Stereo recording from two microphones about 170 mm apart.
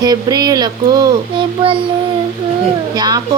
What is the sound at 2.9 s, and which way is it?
Speech, 25° right (ahead or behind).